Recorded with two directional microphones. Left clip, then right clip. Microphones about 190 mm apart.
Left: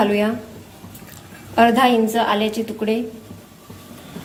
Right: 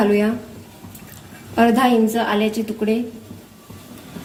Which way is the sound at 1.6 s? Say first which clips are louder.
Left 1 dB; 35° right (ahead or behind).